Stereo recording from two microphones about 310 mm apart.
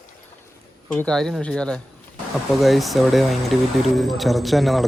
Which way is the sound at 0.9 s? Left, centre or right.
Centre.